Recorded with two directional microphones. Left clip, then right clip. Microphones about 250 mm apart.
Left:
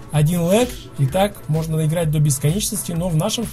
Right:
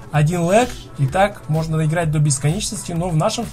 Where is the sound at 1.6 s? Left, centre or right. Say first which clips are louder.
Right 1 dB; left.